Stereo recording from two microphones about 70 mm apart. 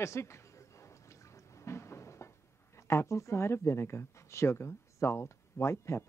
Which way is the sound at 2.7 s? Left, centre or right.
Left.